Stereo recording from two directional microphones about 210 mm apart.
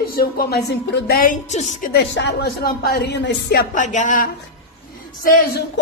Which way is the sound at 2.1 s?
55° left (ahead or behind).